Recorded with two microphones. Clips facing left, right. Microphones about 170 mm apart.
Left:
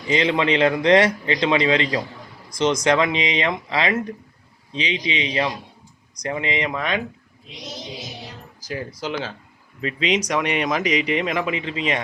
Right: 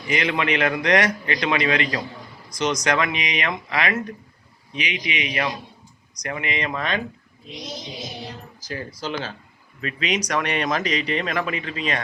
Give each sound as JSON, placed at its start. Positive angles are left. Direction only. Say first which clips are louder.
{"t": 0.1, "sound": "speech", "louder": "left 3 dB", "side_deg": 25}
{"t": 6.7, "sound": "speech", "louder": "left 1 dB", "side_deg": 10}
{"t": 8.6, "sound": "speech", "louder": "left 2 dB", "side_deg": 10}